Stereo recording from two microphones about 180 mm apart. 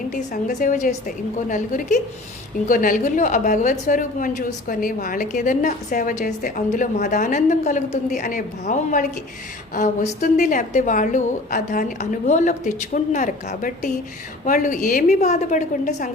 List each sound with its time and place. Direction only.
0.1 s a woman's voice: 45° left (ahead or behind)